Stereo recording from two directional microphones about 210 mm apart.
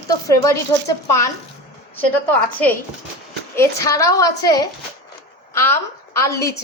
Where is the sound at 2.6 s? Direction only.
5° left (ahead or behind).